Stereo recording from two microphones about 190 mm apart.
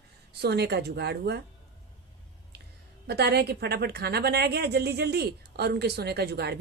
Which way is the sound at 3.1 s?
60° right (ahead or behind).